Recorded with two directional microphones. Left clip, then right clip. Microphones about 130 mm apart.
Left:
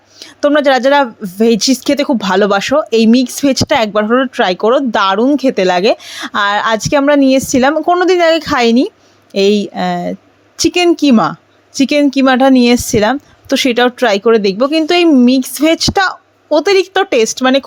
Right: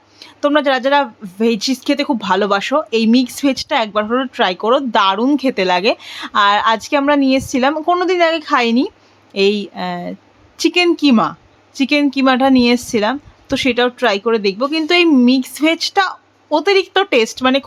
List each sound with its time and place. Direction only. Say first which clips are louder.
0.2 s a woman's voice: left 4 dB; 30° left (ahead or behind)
3.5 s a woman's voice: left 6 dB; 45° left (ahead or behind); by 11.2 s 30° left (ahead or behind)
11.2 s a woman's voice: left 3 dB; 40° left (ahead or behind)